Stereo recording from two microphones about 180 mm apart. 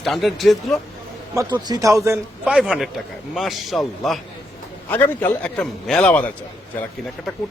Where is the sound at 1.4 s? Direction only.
20° right (ahead or behind).